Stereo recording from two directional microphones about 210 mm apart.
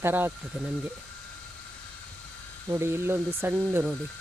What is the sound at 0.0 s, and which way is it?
Speech, 10° right (ahead or behind).